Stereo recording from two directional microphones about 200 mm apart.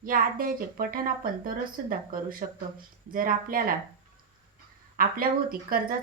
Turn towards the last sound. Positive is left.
turn(degrees=-45)  # may be behind; listen again after turning